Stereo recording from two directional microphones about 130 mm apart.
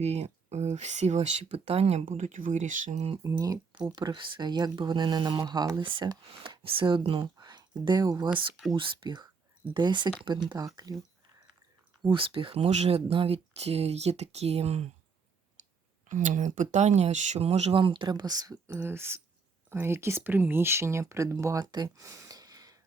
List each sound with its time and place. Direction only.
0.0 s speech: 55° right (ahead or behind)
3.2 s speech: 25° right (ahead or behind)
5.8 s speech: 40° right (ahead or behind)
12.0 s speech: 40° right (ahead or behind)
16.0 s speech: 75° right (ahead or behind); by 17.7 s 55° right (ahead or behind)
17.7 s speech: 40° right (ahead or behind)
18.7 s speech: 15° right (ahead or behind); by 21.8 s 30° right (ahead or behind)
21.8 s a sound: 25° right (ahead or behind)